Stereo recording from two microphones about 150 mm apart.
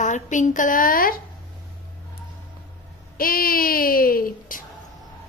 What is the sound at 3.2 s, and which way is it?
Speech, 75° left (ahead or behind).